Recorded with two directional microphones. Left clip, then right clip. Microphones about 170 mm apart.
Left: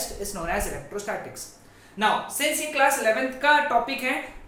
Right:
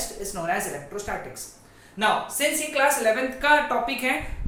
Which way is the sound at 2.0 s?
15° left (ahead or behind).